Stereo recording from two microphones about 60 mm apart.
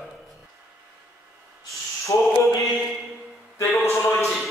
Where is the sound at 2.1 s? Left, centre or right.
Left.